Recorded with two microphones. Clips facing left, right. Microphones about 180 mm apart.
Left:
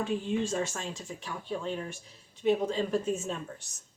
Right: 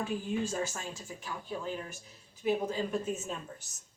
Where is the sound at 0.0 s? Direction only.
25° left (ahead or behind).